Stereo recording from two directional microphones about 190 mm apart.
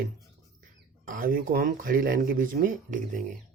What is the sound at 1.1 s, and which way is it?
Speech, 50° right (ahead or behind).